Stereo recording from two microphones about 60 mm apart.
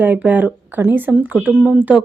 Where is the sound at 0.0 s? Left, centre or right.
Right.